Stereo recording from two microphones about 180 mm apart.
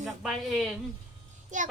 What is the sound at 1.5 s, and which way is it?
Speech, 45° right (ahead or behind).